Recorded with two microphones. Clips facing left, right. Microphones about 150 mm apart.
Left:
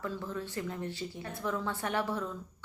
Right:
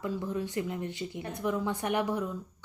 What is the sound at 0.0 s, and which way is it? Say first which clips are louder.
Speech: right 4 dB; 15° right (ahead or behind).